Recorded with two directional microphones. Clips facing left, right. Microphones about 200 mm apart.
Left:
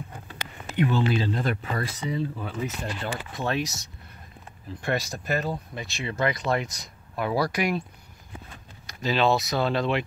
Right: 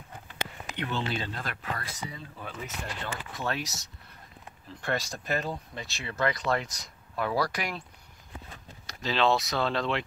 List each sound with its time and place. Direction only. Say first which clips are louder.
0.7 s speech: left 9 dB; 10° left (ahead or behind)
1.0 s speech: left 9 dB; 25° left (ahead or behind)
3.1 s speech: left 4 dB; 20° left (ahead or behind)
4.9 s speech: left 3 dB; 10° left (ahead or behind)
9.0 s speech: left 3 dB; 10° left (ahead or behind)